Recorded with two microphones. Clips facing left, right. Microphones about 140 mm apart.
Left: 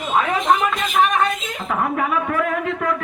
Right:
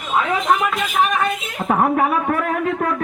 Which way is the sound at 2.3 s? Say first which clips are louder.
Right 1 dB; 40° right (ahead or behind).